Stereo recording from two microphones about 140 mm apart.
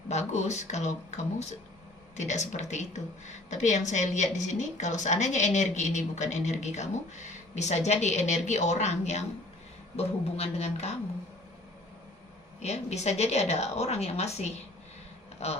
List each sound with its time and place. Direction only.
0.1 s speech: 55° left (ahead or behind)
12.6 s speech: 55° left (ahead or behind)